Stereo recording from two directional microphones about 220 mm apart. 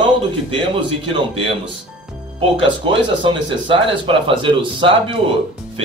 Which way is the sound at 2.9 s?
25° right (ahead or behind).